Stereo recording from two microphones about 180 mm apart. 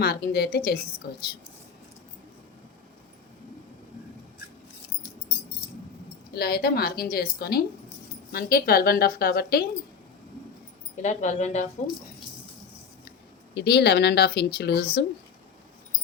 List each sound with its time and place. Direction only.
0.0 s a woman's voice: 65° left (ahead or behind)
6.3 s a woman's voice: 60° left (ahead or behind)
11.0 s speech: 40° left (ahead or behind)
13.5 s a woman's voice: 65° left (ahead or behind)